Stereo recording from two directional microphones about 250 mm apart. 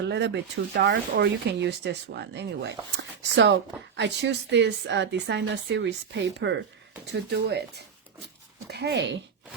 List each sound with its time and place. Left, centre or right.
0.0 s speech: right
8.7 s speech: right